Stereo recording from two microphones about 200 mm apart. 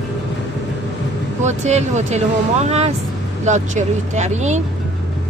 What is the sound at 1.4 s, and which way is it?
Speech, 35° right (ahead or behind).